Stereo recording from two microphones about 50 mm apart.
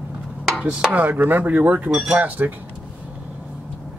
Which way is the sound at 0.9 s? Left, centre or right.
Right.